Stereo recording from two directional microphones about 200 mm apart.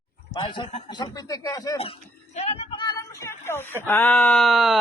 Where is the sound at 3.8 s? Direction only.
10° left (ahead or behind).